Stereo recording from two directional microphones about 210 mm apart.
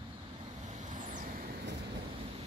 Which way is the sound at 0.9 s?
40° right (ahead or behind).